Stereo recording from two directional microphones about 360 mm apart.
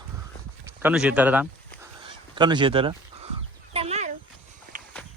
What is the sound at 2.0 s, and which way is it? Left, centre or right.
Honk, centre.